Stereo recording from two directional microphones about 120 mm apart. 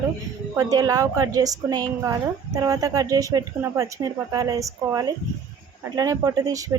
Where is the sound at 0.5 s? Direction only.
30° right (ahead or behind).